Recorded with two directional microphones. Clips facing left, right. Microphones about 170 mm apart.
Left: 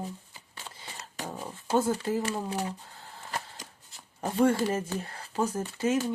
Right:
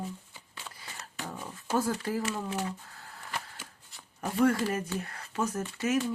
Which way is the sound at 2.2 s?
35° left (ahead or behind).